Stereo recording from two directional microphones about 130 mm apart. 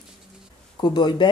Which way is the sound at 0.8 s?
35° left (ahead or behind).